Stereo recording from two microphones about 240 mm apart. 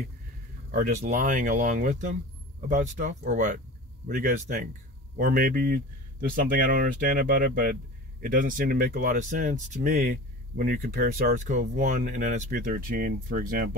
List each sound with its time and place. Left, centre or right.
0.7 s speech: right